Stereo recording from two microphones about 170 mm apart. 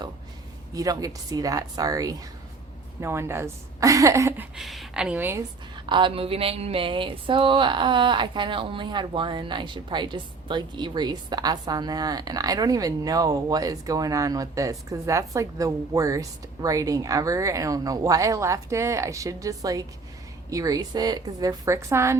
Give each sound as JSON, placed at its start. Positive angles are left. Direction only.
{"t": 0.7, "sound": "a woman's voice", "side_deg": -20}
{"t": 4.5, "sound": "speech", "side_deg": 0}
{"t": 5.8, "sound": "speech", "side_deg": -30}